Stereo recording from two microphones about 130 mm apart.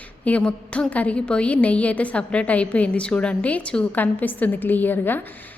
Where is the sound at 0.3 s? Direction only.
10° left (ahead or behind).